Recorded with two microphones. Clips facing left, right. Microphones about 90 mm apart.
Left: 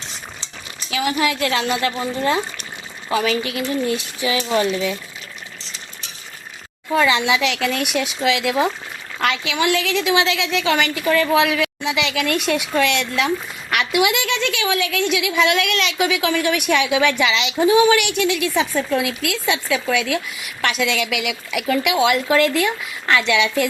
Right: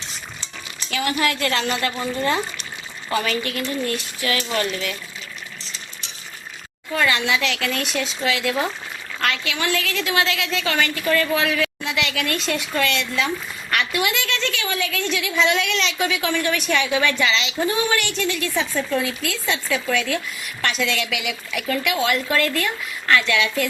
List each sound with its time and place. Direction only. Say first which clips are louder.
0.9 s a woman's voice: left 2 dB; 5° left (ahead or behind)
6.9 s speech: left 4 dB; 15° left (ahead or behind)